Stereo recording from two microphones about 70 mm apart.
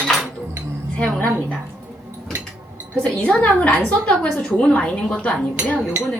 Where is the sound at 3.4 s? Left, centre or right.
Centre.